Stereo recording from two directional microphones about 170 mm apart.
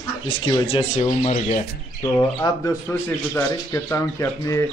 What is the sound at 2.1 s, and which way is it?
Speech, 15° left (ahead or behind).